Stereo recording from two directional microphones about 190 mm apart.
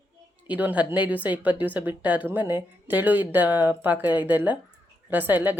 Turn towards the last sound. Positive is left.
turn(degrees=-10)  # may be behind; listen again after turning